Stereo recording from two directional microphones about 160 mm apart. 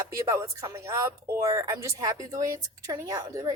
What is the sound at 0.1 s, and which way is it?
A woman's voice, 20° right (ahead or behind).